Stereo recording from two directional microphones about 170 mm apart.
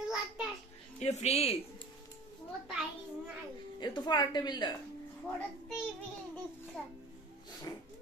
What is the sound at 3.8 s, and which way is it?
Speech, 25° left (ahead or behind).